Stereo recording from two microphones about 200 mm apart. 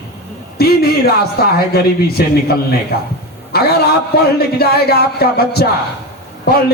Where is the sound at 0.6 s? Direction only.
50° left (ahead or behind).